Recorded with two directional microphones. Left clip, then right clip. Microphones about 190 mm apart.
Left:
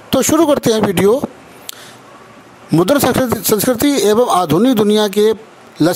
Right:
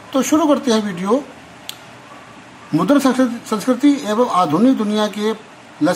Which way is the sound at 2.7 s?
50° left (ahead or behind).